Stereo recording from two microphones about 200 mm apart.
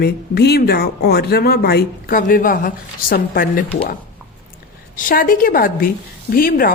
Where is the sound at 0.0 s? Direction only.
55° left (ahead or behind).